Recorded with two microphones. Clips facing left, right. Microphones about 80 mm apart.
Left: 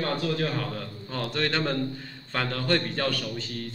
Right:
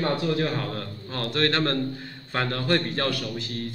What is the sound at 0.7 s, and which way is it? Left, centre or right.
A man's voice, centre.